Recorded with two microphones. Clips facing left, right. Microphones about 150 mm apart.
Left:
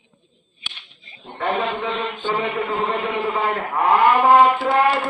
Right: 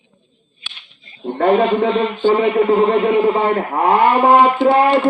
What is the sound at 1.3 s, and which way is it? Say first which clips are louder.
A man's voice: right 9 dB; 50° right (ahead or behind).